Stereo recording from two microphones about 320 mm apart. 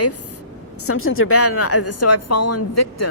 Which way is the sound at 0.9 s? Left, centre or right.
Left.